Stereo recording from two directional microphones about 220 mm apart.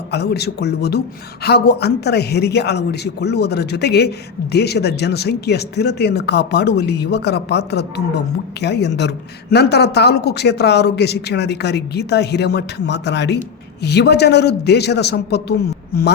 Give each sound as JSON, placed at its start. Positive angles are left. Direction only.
{"t": 0.1, "sound": "speech", "side_deg": 45}